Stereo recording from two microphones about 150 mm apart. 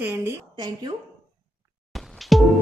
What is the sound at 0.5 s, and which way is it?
Speech, 30° right (ahead or behind).